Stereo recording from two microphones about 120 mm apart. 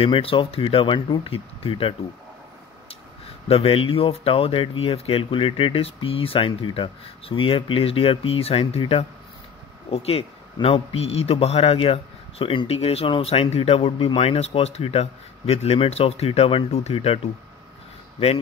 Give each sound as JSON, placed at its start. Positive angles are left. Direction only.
{"t": 0.0, "sound": "speech", "side_deg": 50}
{"t": 3.4, "sound": "a man's voice", "side_deg": 50}